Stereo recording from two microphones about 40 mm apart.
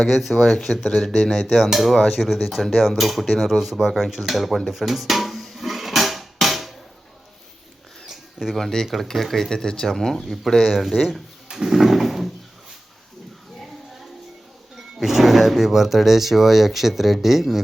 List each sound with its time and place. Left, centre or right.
0.0 s speech: centre
0.4 s speech: centre
8.0 s a sound: centre
8.5 s speech: centre
14.8 s speech: centre